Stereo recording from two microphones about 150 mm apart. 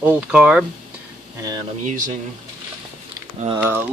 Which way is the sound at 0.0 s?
10° right (ahead or behind).